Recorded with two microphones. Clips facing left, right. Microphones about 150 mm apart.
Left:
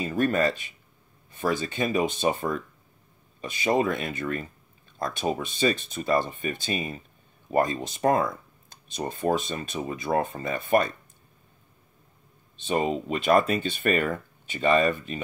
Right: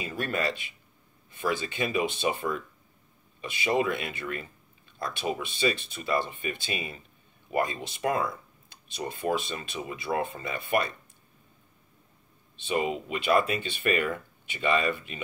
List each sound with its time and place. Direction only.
0.0 s speech: 40° left (ahead or behind)
12.5 s speech: 45° left (ahead or behind)